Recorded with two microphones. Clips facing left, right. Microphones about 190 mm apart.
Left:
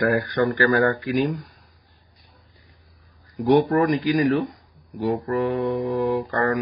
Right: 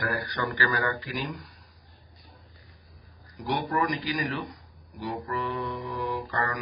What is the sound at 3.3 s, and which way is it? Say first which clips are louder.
Speech: left 12 dB; 50° left (ahead or behind).